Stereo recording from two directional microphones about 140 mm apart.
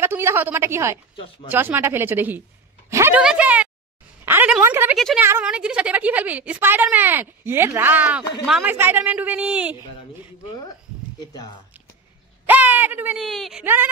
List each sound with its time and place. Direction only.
0.0 s a woman's voice: 20° right (ahead or behind)
1.1 s speech: 35° left (ahead or behind)
1.5 s a woman's voice: 15° right (ahead or behind)
2.9 s a sound: 20° right (ahead or behind)
3.2 s a woman's voice: 10° right (ahead or behind)
4.2 s a sound: 15° right (ahead or behind)
4.9 s a woman's voice: centre (ahead or behind)
12.4 s speech: 15° right (ahead or behind)
13.2 s a woman's voice: centre (ahead or behind)